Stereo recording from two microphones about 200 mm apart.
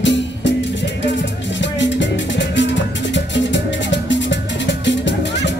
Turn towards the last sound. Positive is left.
turn(degrees=65)  # may be behind; listen again after turning